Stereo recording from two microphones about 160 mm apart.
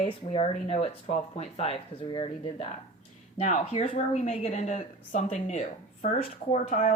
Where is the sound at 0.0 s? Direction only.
40° left (ahead or behind).